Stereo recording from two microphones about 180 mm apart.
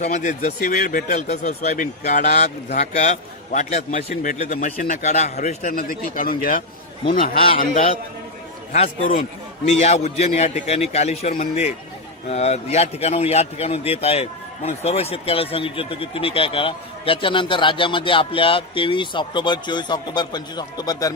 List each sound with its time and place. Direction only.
0.0 s a man's voice: 40° left (ahead or behind)
8.7 s a man's voice: 35° left (ahead or behind)